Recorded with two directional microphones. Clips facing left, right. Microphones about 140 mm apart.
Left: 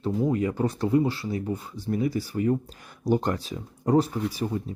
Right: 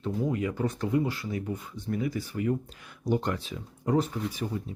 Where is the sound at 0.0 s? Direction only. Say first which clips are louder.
Left 4 dB; 35° left (ahead or behind).